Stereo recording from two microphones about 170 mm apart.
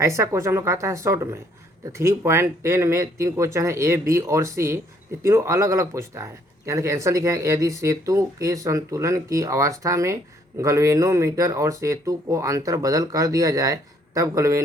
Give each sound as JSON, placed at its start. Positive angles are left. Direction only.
{"t": 0.0, "sound": "speech", "side_deg": -15}